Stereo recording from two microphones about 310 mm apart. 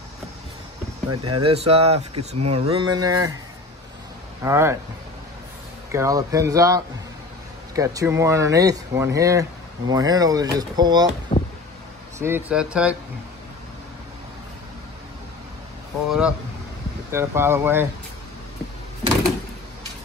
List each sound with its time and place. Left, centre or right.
1.1 s speech: right
1.4 s speech: centre
4.4 s speech: centre
5.9 s speech: centre
11.3 s a sound: centre
12.2 s speech: centre
16.1 s speech: centre